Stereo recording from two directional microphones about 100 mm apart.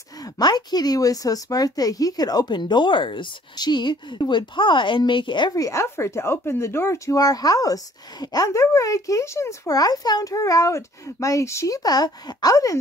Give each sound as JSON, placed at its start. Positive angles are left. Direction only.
{"t": 0.2, "sound": "a woman's voice", "side_deg": 45}
{"t": 5.5, "sound": "speech", "side_deg": 35}